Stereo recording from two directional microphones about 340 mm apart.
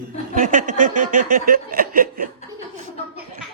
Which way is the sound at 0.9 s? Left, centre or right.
Right.